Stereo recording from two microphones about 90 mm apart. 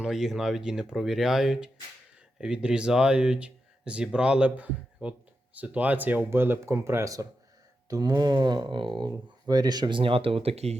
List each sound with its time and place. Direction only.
0.0 s speech: 5° right (ahead or behind); by 9.0 s 65° right (ahead or behind)
9.0 s speech: 45° right (ahead or behind)
10.0 s speech: 90° right